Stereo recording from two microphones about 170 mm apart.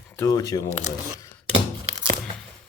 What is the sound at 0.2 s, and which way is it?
Speech, 20° left (ahead or behind).